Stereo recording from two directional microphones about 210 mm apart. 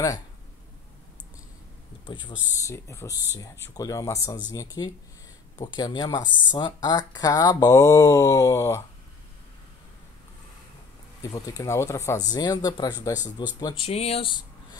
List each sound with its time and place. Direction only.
2.0 s speech: 20° left (ahead or behind)
11.3 s speech: 15° left (ahead or behind)
13.8 s speech: 30° left (ahead or behind)